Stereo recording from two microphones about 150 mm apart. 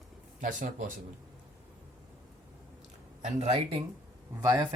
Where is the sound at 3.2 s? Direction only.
45° right (ahead or behind).